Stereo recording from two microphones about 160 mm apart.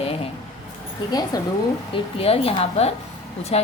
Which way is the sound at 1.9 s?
35° left (ahead or behind).